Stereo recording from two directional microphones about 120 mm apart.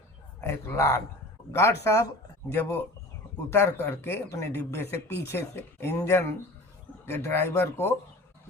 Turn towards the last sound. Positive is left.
turn(degrees=20)  # may be behind; listen again after turning